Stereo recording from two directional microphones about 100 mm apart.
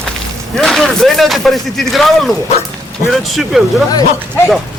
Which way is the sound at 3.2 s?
Centre (ahead or behind).